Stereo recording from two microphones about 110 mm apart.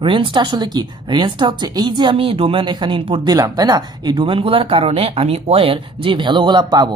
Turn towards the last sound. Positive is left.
turn(degrees=-40)  # may be behind; listen again after turning